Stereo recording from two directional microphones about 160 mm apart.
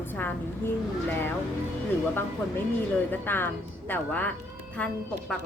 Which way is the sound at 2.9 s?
10° left (ahead or behind).